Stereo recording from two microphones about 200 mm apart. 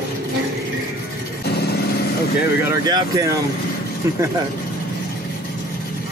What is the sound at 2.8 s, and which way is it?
Speech, 15° right (ahead or behind).